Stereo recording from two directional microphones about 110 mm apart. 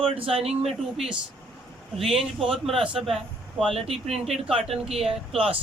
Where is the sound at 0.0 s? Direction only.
55° right (ahead or behind).